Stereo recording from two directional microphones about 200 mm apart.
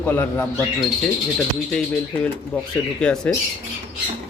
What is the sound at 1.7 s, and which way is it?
Speech, 5° left (ahead or behind).